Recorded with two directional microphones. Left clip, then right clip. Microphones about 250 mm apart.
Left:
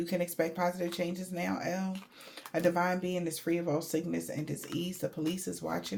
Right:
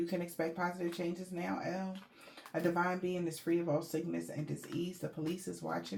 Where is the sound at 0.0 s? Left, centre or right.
Left.